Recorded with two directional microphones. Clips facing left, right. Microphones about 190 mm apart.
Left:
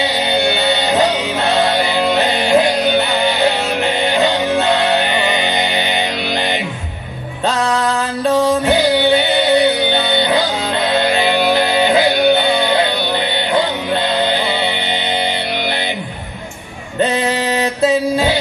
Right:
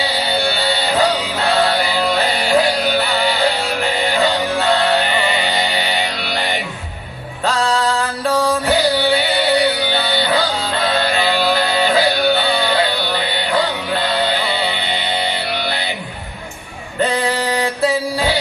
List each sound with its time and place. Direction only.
0.0 s music: 20° left (ahead or behind)
8.3 s music: 20° left (ahead or behind)
17.0 s music: 20° left (ahead or behind)